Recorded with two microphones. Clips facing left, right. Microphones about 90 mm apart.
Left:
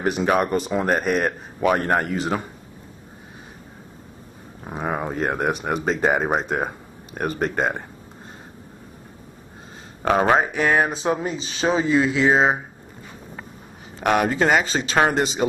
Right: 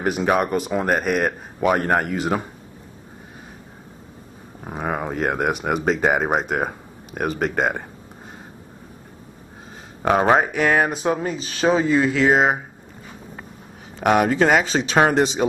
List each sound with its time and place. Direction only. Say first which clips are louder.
0.0 s a man's voice: even; 5° right (ahead or behind)
4.6 s speech: even; centre (ahead or behind)
10.0 s speech: right 1 dB; 10° right (ahead or behind)
10.5 s speech: right 1 dB; 15° left (ahead or behind)
10.8 s a man's voice: right 1 dB; 10° right (ahead or behind)
13.9 s a man's voice: right 2 dB; 5° right (ahead or behind)